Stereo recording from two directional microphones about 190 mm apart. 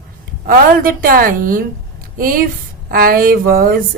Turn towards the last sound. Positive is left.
turn(degrees=-50)  # may be behind; listen again after turning